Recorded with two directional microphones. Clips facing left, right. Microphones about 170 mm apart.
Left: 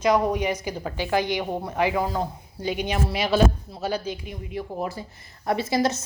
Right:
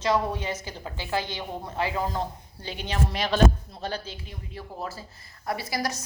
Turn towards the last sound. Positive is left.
turn(degrees=25)  # may be behind; listen again after turning